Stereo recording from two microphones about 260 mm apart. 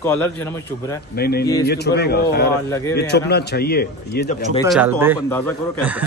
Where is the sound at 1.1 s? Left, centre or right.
Left.